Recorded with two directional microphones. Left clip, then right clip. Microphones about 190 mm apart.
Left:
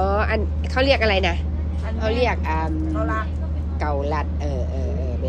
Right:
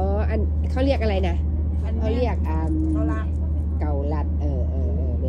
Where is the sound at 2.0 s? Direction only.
5° right (ahead or behind).